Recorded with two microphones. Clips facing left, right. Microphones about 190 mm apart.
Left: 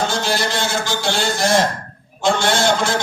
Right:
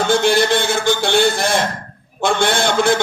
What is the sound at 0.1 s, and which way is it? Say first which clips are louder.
A man's voice: right 7 dB; 60° right (ahead or behind).